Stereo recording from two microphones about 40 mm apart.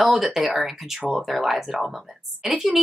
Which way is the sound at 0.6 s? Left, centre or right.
Centre.